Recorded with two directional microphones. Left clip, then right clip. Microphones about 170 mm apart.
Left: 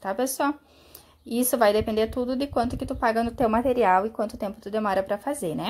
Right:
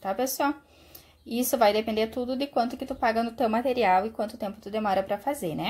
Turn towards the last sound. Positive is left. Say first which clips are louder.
# left 1 dB
turn(degrees=10)  # may be behind; listen again after turning